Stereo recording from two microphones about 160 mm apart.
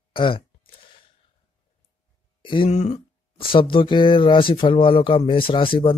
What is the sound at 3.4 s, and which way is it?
Speech, 30° left (ahead or behind).